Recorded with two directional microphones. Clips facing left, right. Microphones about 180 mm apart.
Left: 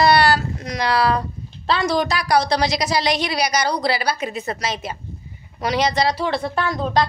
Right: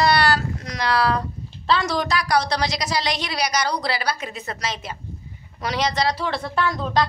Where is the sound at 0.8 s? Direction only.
5° left (ahead or behind).